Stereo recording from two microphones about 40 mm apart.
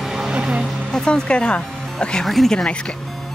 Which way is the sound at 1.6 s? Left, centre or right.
Centre.